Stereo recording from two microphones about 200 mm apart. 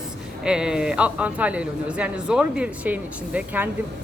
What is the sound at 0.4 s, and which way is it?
A man's voice, 5° right (ahead or behind).